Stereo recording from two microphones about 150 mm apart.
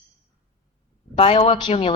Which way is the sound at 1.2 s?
35° left (ahead or behind).